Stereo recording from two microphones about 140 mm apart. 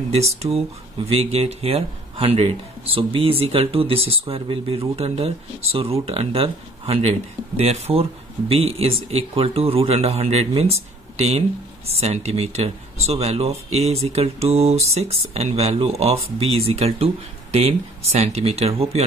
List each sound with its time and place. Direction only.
0.1 s speech: 50° right (ahead or behind)